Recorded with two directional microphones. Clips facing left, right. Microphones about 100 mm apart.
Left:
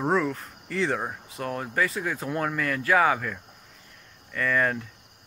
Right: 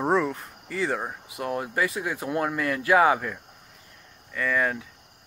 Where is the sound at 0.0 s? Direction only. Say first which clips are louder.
Right 1 dB; 10° right (ahead or behind).